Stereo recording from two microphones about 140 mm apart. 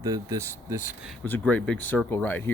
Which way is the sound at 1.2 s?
10° left (ahead or behind).